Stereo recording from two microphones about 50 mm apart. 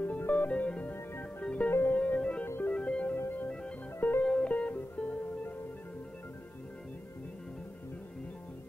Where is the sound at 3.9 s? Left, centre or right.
Left.